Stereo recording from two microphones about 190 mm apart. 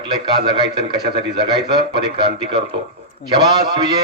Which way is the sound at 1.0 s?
60° right (ahead or behind).